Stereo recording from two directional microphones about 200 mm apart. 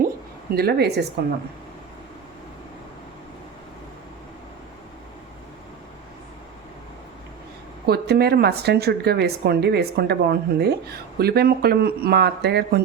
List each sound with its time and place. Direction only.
0.5 s speech: 50° right (ahead or behind)
7.9 s speech: 50° right (ahead or behind)